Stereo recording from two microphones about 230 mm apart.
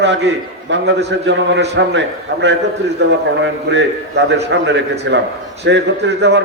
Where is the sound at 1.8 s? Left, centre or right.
Right.